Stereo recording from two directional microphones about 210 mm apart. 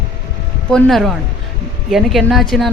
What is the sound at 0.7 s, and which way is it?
A woman's voice, centre (ahead or behind).